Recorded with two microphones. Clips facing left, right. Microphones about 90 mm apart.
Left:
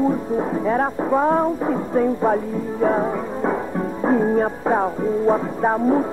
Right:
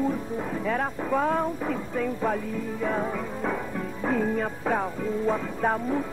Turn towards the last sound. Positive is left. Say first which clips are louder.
# left 8 dB
turn(degrees=30)  # may be behind; listen again after turning